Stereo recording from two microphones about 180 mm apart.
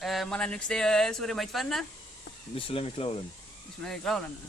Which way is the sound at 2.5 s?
30° left (ahead or behind).